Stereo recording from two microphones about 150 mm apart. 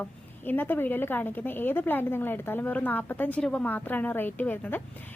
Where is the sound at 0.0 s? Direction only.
15° left (ahead or behind).